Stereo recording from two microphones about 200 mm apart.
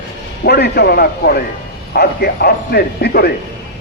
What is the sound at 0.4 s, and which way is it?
A man's voice, 55° left (ahead or behind).